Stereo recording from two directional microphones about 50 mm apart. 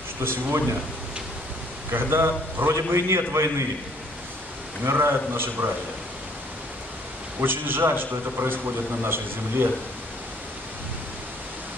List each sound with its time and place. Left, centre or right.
0.2 s a man's voice: right
2.0 s a man's voice: right
2.7 s a man's voice: right
4.8 s a man's voice: right
7.3 s a man's voice: right